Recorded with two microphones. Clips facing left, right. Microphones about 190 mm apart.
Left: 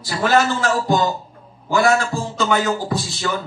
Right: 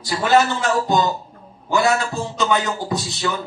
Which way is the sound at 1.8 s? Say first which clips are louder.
Left 3 dB; 20° right (ahead or behind).